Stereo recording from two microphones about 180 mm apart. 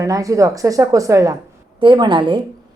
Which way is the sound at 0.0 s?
20° right (ahead or behind).